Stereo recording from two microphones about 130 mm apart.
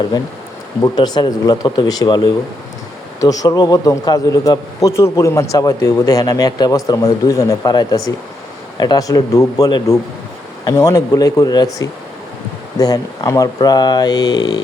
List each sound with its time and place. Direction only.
0.8 s a man's voice: 30° left (ahead or behind)